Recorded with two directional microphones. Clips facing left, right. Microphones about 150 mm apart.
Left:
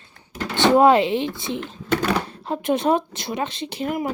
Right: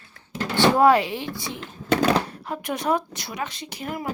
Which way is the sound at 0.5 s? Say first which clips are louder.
Left 2 dB; 20° left (ahead or behind).